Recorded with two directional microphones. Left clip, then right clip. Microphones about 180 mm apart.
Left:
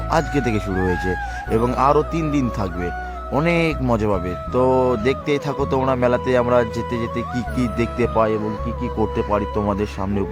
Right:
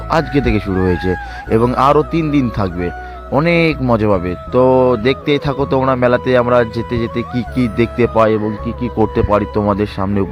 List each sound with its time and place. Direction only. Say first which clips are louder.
0.1 s speech: right 5 dB; 15° right (ahead or behind)